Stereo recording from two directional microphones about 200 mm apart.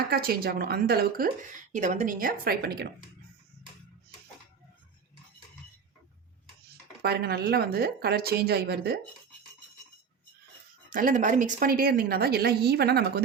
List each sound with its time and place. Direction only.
0.0 s a woman's voice: 50° right (ahead or behind)
1.7 s a woman's voice: 40° right (ahead or behind)
7.0 s a woman's voice: 55° right (ahead or behind)
10.8 s a woman's voice: 40° right (ahead or behind)